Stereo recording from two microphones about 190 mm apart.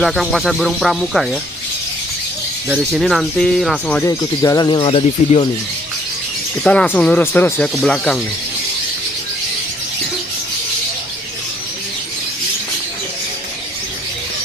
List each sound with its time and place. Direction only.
0.0 s speech: centre (ahead or behind)
2.7 s speech: 5° right (ahead or behind)
4.0 s speech: 15° left (ahead or behind)
6.6 s speech: 5° left (ahead or behind)